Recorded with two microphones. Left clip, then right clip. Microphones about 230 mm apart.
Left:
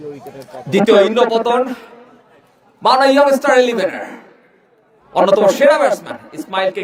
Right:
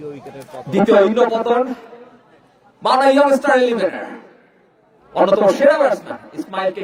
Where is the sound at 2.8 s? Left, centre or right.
Left.